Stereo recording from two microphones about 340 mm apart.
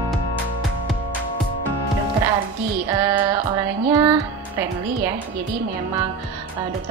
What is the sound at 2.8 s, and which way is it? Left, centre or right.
Speech, centre.